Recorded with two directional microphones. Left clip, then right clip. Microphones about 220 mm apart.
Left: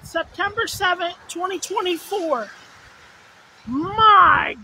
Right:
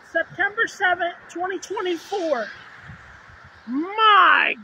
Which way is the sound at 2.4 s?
55° left (ahead or behind).